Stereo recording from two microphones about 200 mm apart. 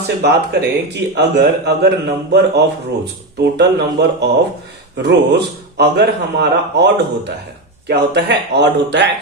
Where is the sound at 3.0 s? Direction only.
55° right (ahead or behind).